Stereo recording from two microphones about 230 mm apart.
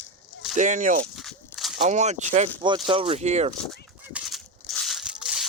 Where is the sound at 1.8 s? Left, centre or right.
Right.